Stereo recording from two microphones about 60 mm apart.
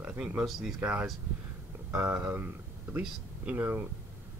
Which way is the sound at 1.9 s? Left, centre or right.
Right.